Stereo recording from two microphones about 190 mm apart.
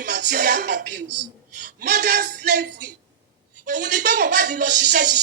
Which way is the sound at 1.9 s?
60° right (ahead or behind).